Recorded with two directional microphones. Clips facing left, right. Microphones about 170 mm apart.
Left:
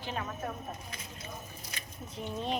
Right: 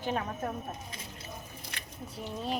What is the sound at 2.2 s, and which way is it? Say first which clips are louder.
Speech: left 1 dB; 5° right (ahead or behind).